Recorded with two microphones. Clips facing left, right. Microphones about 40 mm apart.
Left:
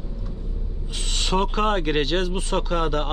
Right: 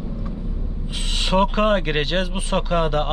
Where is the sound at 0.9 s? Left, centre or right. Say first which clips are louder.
Right 3 dB; centre.